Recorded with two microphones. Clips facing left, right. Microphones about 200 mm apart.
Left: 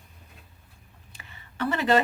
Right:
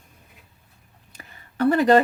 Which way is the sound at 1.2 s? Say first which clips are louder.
Right 9 dB; 45° right (ahead or behind).